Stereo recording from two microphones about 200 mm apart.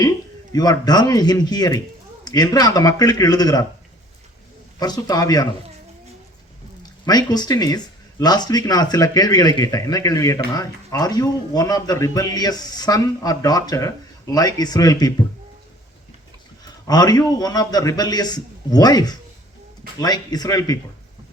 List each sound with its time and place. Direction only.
0.5 s speech: 20° left (ahead or behind)
4.8 s speech: 20° left (ahead or behind)
7.0 s speech: 20° left (ahead or behind)
16.8 s speech: 20° left (ahead or behind)